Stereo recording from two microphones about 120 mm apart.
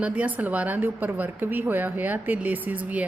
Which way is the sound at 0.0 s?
15° right (ahead or behind).